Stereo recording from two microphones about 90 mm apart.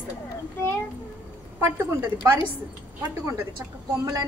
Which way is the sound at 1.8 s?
30° right (ahead or behind).